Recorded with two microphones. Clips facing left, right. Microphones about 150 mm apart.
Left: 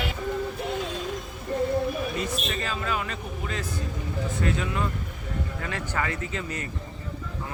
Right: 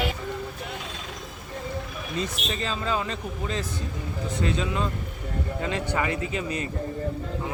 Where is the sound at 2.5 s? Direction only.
25° right (ahead or behind).